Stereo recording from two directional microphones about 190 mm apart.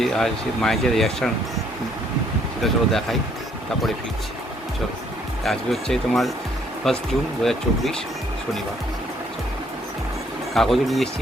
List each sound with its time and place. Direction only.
0.0 s speech: centre (ahead or behind)
2.6 s speech: centre (ahead or behind)
5.5 s speech: centre (ahead or behind)
10.5 s speech: centre (ahead or behind)